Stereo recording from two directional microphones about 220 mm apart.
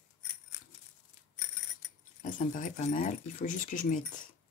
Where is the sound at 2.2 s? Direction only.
35° left (ahead or behind).